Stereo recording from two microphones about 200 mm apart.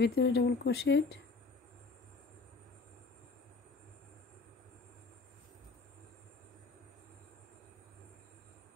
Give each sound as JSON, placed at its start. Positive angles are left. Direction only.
{"t": 0.0, "sound": "speech", "side_deg": 60}